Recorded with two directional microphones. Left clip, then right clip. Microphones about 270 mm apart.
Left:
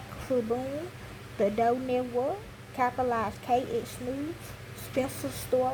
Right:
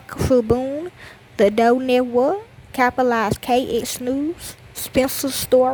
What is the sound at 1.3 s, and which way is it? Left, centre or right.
A woman's voice, right.